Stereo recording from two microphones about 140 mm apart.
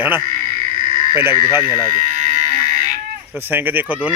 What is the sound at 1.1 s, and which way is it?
Speech, 15° right (ahead or behind).